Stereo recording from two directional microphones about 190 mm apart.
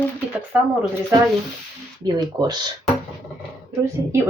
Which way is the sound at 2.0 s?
20° right (ahead or behind).